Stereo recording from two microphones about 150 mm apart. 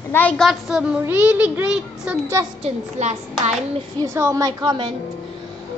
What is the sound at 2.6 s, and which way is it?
Speech, 50° right (ahead or behind).